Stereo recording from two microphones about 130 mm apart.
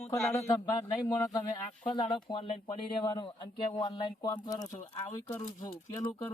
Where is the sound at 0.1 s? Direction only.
20° left (ahead or behind).